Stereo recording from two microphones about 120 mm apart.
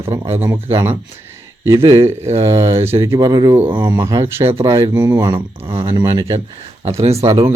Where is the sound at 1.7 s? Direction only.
50° right (ahead or behind).